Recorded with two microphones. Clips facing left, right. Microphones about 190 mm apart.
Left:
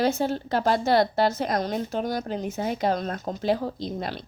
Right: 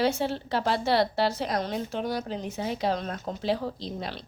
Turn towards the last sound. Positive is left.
turn(degrees=50)  # may be behind; listen again after turning